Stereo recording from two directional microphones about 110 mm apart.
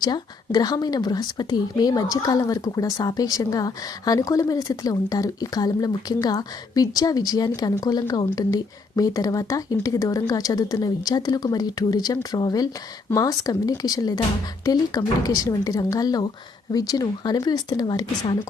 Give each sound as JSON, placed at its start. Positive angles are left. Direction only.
{"t": 0.0, "sound": "speech", "side_deg": 40}